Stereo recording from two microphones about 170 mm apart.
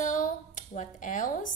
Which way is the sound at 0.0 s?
50° left (ahead or behind).